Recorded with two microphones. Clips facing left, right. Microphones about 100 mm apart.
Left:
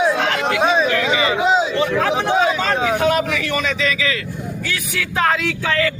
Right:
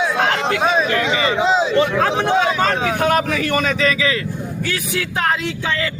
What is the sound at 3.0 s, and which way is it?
Speech, 40° right (ahead or behind).